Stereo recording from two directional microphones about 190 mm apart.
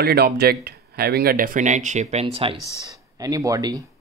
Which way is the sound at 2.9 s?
20° right (ahead or behind).